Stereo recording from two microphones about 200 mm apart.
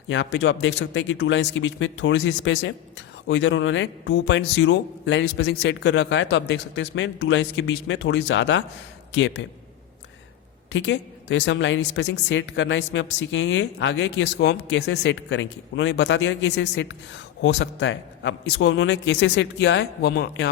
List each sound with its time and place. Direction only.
0.1 s a woman's voice: 65° left (ahead or behind)
10.7 s a woman's voice: 65° left (ahead or behind)